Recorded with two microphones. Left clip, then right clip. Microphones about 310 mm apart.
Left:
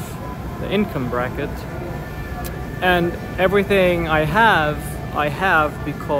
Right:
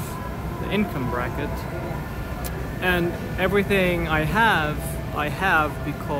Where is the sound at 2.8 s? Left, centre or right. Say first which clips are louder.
Left 5 dB; centre.